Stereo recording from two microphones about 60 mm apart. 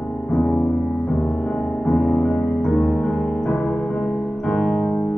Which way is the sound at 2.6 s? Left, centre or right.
Centre.